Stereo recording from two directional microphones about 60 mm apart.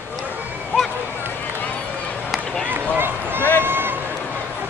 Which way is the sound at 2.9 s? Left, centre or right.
Right.